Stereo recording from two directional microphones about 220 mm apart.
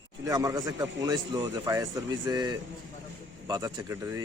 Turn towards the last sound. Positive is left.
turn(degrees=-15)  # may be behind; listen again after turning